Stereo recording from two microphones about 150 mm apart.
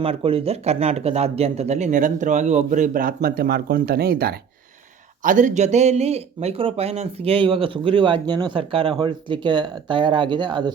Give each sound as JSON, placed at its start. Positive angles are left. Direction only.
{"t": 0.0, "sound": "speech", "side_deg": -40}
{"t": 5.2, "sound": "speech", "side_deg": -60}